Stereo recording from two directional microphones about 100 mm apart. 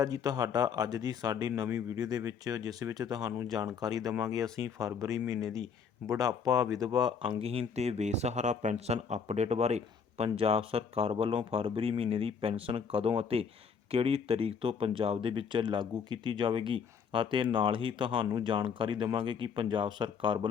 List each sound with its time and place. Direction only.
0.0 s speech: 35° right (ahead or behind)
7.2 s speech: 65° right (ahead or behind)